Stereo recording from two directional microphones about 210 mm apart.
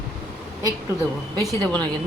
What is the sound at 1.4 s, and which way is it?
Speech, 5° left (ahead or behind).